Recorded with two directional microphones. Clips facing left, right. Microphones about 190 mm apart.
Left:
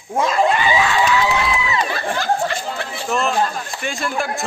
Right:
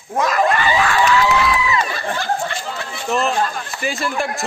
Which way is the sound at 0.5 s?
15° left (ahead or behind).